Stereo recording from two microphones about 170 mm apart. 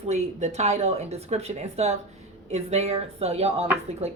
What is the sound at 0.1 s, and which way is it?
Speech, 40° right (ahead or behind).